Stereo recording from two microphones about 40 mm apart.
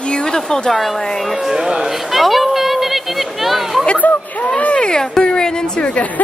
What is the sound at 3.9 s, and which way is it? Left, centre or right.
Speech, left.